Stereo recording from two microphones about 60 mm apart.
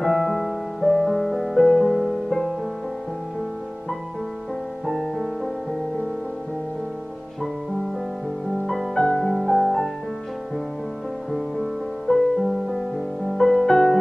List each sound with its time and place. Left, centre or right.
0.0 s music: centre
4.8 s music: centre
8.6 s music: centre
11.3 s music: centre